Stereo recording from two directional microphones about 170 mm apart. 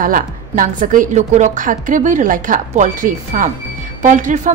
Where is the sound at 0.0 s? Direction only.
55° right (ahead or behind).